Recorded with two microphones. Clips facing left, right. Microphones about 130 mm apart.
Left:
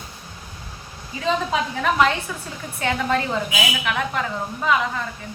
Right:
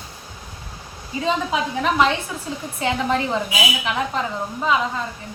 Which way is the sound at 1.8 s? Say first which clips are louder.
Right 1 dB; 20° right (ahead or behind).